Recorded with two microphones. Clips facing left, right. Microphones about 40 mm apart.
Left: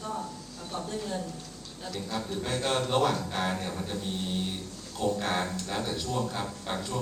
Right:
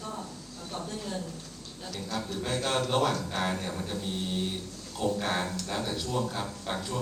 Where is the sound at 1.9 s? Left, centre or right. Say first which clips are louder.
Left 1 dB; centre.